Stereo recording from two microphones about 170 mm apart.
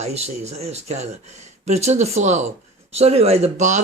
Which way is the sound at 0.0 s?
40° right (ahead or behind).